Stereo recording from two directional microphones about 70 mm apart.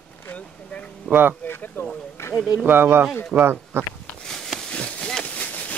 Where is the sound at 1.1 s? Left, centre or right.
Centre.